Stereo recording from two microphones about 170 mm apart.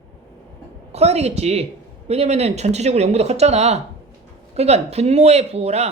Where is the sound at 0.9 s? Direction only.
40° right (ahead or behind).